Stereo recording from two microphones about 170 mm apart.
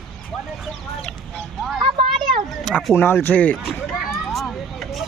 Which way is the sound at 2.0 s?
30° right (ahead or behind).